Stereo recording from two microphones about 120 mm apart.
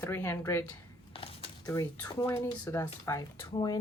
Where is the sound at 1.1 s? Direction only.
50° left (ahead or behind).